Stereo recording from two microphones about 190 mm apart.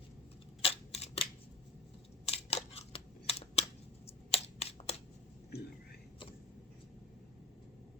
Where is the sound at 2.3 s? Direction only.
30° left (ahead or behind).